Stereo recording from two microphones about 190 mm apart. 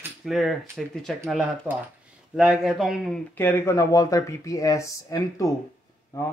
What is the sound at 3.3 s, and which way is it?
A man's voice, 15° left (ahead or behind).